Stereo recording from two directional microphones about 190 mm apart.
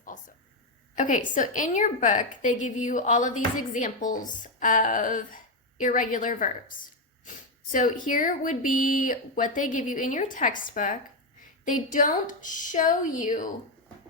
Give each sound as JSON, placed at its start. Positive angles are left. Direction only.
{"t": 0.9, "sound": "a woman's voice", "side_deg": 40}